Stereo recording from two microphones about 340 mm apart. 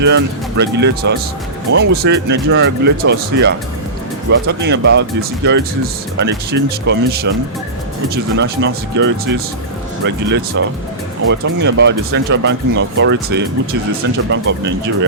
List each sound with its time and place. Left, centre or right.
0.0 s speech: right